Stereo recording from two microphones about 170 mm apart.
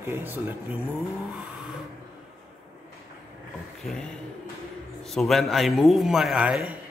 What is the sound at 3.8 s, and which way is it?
A man's voice, 5° left (ahead or behind).